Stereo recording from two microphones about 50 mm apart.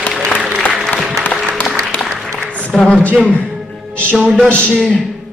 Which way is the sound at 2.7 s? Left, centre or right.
Centre.